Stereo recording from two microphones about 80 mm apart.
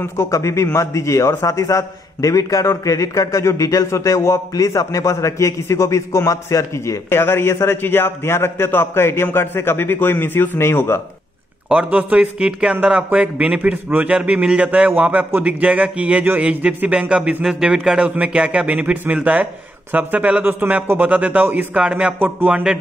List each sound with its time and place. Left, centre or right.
0.0 s a man's voice: left
7.1 s a man's voice: left
11.7 s speech: centre